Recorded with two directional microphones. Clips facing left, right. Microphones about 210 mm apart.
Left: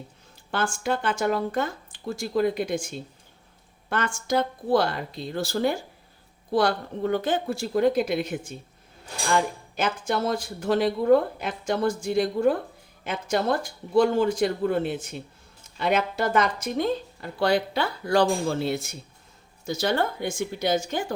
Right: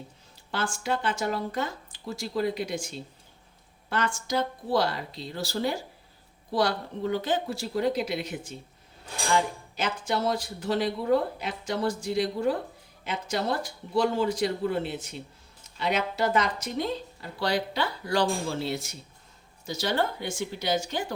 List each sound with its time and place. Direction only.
0.5 s speech: 50° left (ahead or behind)
10.1 s speech: 50° left (ahead or behind)